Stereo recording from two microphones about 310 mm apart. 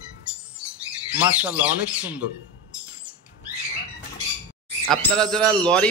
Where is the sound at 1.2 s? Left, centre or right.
Centre.